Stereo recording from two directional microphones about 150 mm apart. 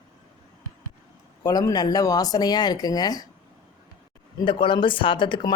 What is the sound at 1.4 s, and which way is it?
Speech, 25° left (ahead or behind).